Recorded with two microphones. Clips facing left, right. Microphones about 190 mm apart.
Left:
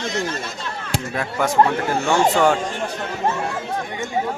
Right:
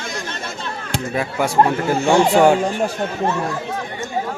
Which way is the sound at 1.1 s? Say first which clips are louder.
Right 1 dB; 10° right (ahead or behind).